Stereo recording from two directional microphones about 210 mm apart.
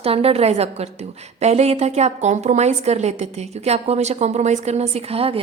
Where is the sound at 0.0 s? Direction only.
30° right (ahead or behind).